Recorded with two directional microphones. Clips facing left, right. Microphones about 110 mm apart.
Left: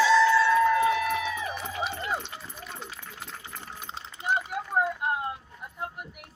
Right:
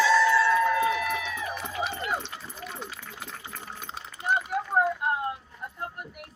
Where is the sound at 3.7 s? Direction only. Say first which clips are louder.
Even; 20° left (ahead or behind).